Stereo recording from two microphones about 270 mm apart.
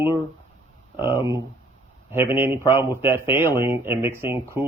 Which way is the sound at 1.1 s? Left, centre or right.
Centre.